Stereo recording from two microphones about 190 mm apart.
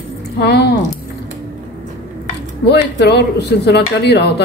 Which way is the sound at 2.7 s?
60° left (ahead or behind).